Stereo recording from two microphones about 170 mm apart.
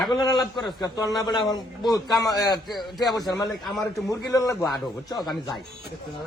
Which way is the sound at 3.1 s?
25° left (ahead or behind).